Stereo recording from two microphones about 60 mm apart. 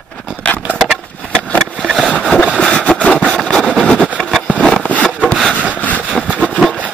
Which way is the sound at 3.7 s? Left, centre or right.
Centre.